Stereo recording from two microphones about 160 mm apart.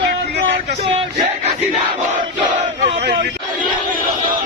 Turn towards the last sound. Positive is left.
turn(degrees=-65)  # may be behind; listen again after turning